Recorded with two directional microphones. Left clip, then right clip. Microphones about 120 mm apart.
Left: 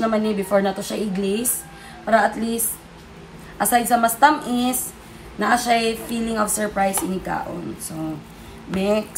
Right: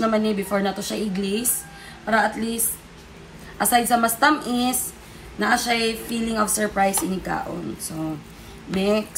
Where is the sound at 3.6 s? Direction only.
Centre (ahead or behind).